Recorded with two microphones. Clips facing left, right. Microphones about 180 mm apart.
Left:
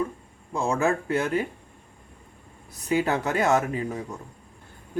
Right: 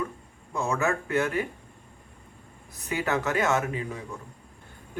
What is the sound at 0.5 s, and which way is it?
Speech, 35° left (ahead or behind).